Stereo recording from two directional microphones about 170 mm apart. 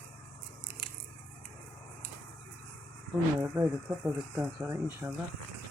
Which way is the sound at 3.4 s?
15° right (ahead or behind).